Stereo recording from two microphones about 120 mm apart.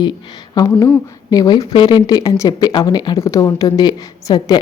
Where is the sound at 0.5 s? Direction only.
35° left (ahead or behind).